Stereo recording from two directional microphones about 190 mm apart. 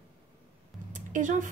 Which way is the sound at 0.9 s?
40° right (ahead or behind).